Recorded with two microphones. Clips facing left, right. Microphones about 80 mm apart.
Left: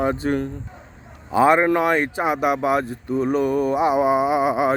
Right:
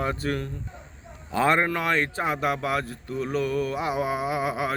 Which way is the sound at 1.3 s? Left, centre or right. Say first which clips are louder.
Left 7 dB; centre.